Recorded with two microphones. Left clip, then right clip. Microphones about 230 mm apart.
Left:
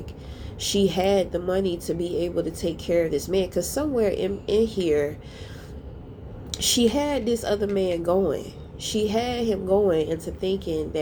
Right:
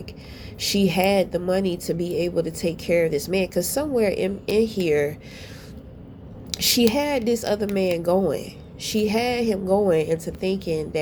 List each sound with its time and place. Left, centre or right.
0.9 s a woman's voice: right
2.0 s a woman's voice: right
2.2 s a woman's voice: right
4.6 s a woman's voice: right
4.9 s a woman's voice: right
6.5 s a sound: right
6.8 s a woman's voice: right